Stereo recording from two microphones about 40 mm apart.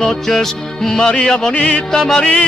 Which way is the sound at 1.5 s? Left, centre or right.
Left.